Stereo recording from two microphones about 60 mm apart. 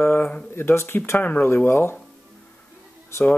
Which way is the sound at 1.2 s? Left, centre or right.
Left.